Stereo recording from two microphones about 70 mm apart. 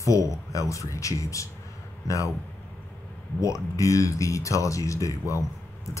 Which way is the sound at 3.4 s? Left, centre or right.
Left.